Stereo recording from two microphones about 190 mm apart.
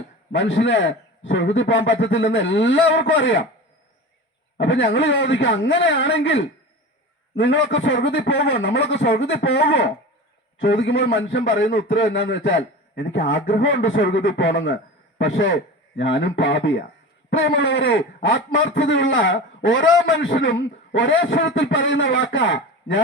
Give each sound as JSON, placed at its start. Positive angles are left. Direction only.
{"t": 0.3, "sound": "a man's voice", "side_deg": 75}
{"t": 4.5, "sound": "a man's voice", "side_deg": 80}
{"t": 7.3, "sound": "a man's voice", "side_deg": 85}
{"t": 8.3, "sound": "speech", "side_deg": 60}
{"t": 8.9, "sound": "a man's voice", "side_deg": 75}
{"t": 20.1, "sound": "a man's voice", "side_deg": 75}